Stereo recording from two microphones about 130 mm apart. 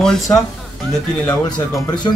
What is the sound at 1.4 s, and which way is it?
Speech, 30° left (ahead or behind).